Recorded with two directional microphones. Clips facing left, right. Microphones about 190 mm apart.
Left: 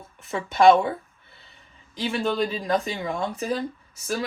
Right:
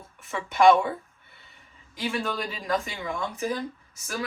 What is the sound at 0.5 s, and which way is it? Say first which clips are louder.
Speech: left 2 dB; 35° left (ahead or behind).